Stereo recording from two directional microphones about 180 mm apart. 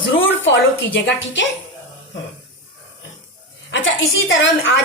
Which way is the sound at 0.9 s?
85° left.